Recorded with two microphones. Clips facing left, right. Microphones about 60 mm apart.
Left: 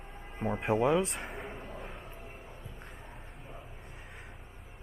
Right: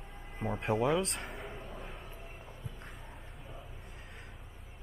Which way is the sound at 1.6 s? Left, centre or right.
Centre.